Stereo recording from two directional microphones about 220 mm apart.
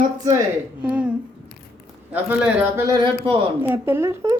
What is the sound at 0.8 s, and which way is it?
Speech, 5° right (ahead or behind).